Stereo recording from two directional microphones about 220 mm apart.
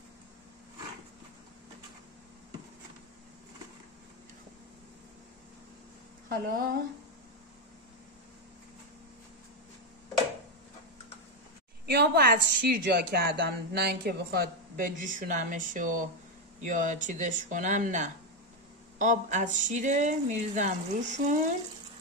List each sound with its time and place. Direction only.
6.2 s a woman's voice: 40° right (ahead or behind)
11.8 s a woman's voice: 45° right (ahead or behind)